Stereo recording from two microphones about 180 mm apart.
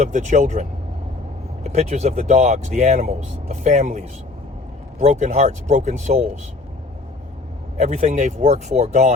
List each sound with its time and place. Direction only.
0.0 s speech: 40° right (ahead or behind)
7.8 s speech: 40° right (ahead or behind)